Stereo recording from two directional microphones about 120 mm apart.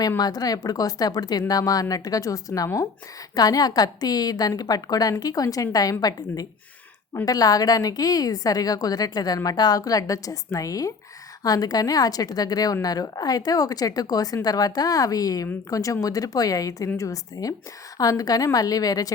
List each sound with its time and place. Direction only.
0.2 s a woman's voice: 30° left (ahead or behind)